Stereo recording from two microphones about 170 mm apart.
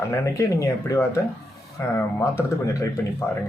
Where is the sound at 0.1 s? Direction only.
20° left (ahead or behind).